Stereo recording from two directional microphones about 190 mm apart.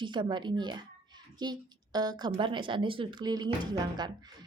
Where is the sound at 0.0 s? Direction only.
25° right (ahead or behind).